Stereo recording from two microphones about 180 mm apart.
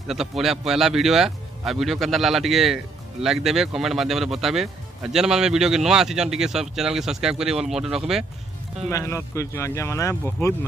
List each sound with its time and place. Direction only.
0.4 s speech: centre (ahead or behind)
8.8 s speech: 15° left (ahead or behind)